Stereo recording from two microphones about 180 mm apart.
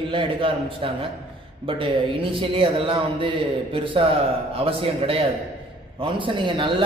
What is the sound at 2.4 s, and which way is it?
A man's voice, 30° right (ahead or behind).